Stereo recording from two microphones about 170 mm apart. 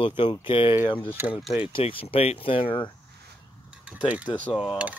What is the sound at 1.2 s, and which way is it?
Typing, 15° right (ahead or behind).